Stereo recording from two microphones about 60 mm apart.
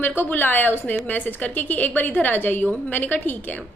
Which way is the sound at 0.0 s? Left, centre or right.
Left.